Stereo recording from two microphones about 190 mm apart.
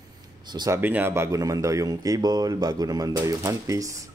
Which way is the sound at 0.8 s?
10° right (ahead or behind).